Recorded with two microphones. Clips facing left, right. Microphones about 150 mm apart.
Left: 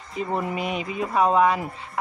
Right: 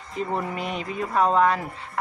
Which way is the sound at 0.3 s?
10° left (ahead or behind).